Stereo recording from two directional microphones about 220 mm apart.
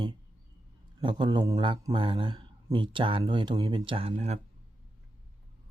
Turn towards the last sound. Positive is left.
turn(degrees=-25)  # may be behind; listen again after turning